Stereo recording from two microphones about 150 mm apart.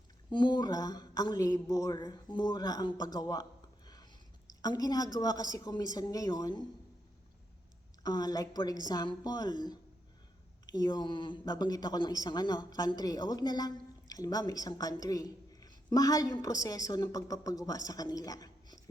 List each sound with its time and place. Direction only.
0.3 s speech: 30° left (ahead or behind)
3.8 s whispering: 25° left (ahead or behind)
4.6 s speech: 25° left (ahead or behind)
8.0 s speech: 25° left (ahead or behind)